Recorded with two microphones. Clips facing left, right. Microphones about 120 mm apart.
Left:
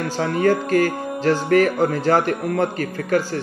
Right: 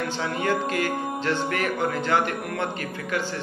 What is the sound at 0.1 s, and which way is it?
A man's voice, 40° left (ahead or behind).